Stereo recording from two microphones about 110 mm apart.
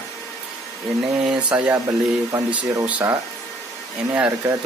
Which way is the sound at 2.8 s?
15° right (ahead or behind).